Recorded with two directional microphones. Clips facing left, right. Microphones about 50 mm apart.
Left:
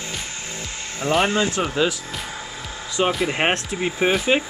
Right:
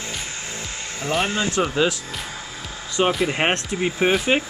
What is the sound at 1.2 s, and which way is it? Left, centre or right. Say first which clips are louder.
Speech: left 3 dB; left.